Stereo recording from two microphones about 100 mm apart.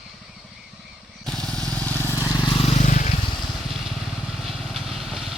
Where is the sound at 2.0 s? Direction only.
25° left (ahead or behind).